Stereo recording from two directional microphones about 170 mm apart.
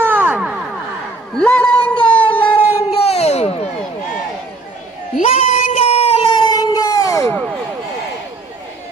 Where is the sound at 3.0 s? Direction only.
40° left (ahead or behind).